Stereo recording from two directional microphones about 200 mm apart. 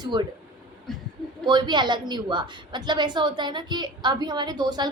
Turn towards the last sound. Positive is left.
turn(degrees=-20)  # may be behind; listen again after turning